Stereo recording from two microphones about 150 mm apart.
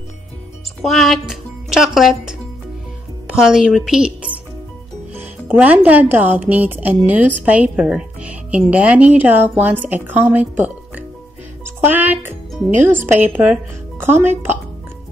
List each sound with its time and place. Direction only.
0.8 s speech: centre (ahead or behind)
11.6 s music: 15° right (ahead or behind)
12.8 s speech: 15° right (ahead or behind)